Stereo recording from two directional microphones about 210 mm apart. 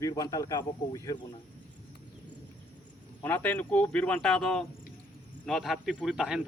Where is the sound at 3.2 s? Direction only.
10° left (ahead or behind).